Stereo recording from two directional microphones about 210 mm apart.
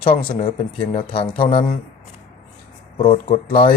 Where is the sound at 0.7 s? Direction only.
25° left (ahead or behind).